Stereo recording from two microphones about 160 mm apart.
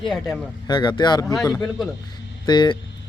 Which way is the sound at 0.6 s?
25° left (ahead or behind).